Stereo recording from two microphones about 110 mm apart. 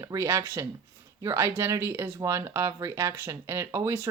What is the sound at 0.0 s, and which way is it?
Speech, 30° right (ahead or behind).